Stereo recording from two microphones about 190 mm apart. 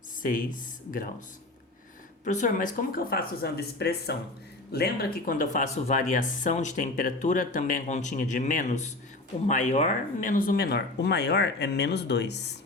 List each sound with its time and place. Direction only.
0.2 s speech: 45° left (ahead or behind)
2.2 s speech: 40° left (ahead or behind); by 12.5 s 60° left (ahead or behind)